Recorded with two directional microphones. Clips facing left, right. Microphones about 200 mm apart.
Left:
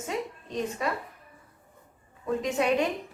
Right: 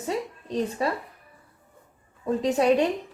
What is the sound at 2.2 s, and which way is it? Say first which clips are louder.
Speech: right 5 dB; 35° right (ahead or behind).